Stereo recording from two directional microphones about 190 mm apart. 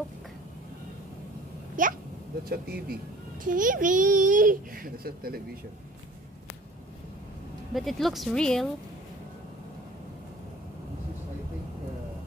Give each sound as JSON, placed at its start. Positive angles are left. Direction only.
{"t": 1.8, "sound": "a child's voice", "side_deg": -45}
{"t": 7.7, "sound": "speech", "side_deg": 0}